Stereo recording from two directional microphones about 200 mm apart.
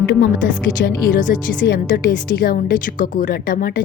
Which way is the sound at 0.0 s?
60° left (ahead or behind).